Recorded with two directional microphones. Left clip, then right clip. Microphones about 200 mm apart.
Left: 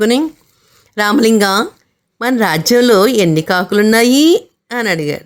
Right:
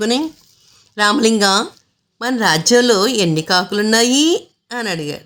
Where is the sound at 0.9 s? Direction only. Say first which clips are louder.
Left 3 dB; 25° left (ahead or behind).